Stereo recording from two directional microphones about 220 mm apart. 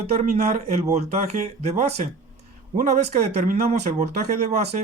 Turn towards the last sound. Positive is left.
turn(degrees=-30)  # may be behind; listen again after turning